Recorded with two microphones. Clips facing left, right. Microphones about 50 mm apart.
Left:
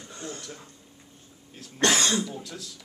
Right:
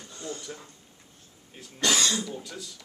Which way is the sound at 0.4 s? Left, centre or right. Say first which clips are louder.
Right 1 dB; centre.